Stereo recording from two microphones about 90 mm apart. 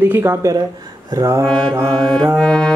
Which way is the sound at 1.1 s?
35° right (ahead or behind).